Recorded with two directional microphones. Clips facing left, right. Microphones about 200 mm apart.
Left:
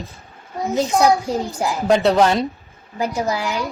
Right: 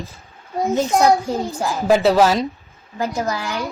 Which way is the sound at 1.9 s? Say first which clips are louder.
Right 1 dB; 5° right (ahead or behind).